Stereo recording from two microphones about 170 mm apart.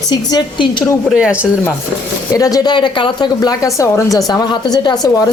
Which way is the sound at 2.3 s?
20° left (ahead or behind).